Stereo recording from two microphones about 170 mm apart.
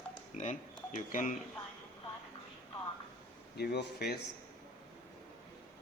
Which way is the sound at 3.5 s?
75° left (ahead or behind).